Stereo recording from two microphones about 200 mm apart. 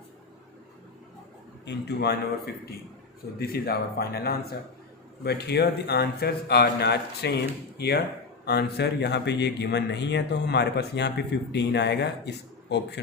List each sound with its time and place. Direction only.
1.6 s speech: 55° left (ahead or behind)
3.3 s speech: 50° left (ahead or behind)